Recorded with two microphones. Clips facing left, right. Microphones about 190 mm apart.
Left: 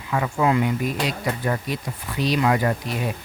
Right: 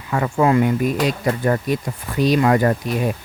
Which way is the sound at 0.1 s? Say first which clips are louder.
Right 4 dB; 45° right (ahead or behind).